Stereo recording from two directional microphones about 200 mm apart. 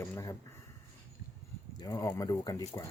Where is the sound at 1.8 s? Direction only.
15° left (ahead or behind).